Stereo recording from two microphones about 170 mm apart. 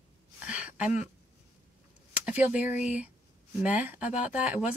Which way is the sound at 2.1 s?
10° right (ahead or behind).